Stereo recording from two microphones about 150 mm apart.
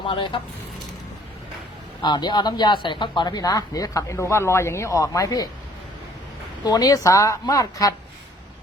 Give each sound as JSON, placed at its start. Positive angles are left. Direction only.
{"t": 0.1, "sound": "speech", "side_deg": 35}
{"t": 2.0, "sound": "speech", "side_deg": 30}
{"t": 6.7, "sound": "speech", "side_deg": 25}